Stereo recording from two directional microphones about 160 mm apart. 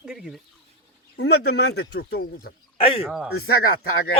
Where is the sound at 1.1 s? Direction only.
90° left.